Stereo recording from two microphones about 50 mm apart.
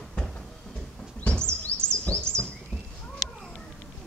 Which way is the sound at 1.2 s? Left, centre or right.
Left.